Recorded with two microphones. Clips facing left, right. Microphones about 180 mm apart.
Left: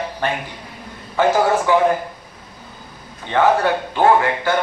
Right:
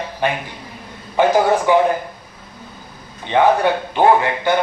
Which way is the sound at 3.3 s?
15° right (ahead or behind).